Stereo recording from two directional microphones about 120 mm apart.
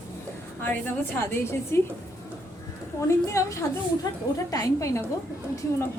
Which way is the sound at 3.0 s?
25° left (ahead or behind).